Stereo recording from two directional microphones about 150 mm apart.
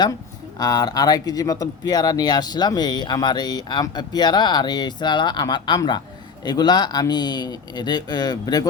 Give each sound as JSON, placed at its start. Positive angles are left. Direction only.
{"t": 0.6, "sound": "speech", "side_deg": 25}